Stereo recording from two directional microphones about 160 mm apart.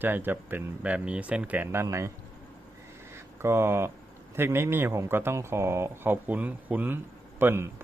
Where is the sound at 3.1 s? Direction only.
15° right (ahead or behind).